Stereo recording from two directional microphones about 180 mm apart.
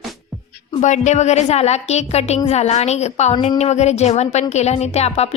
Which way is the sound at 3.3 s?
25° left (ahead or behind).